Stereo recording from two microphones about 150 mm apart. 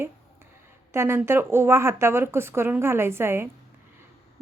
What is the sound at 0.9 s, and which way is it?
A woman's voice, 15° right (ahead or behind).